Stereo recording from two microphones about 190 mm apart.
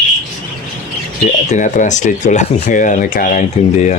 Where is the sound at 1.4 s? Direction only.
40° left (ahead or behind).